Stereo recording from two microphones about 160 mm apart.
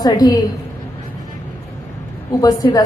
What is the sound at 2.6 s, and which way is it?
Speech, 25° left (ahead or behind).